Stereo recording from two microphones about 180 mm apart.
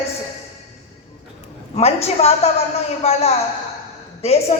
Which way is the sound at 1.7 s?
35° left (ahead or behind).